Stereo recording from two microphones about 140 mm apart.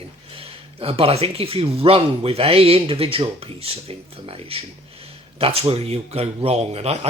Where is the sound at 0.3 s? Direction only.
40° right (ahead or behind).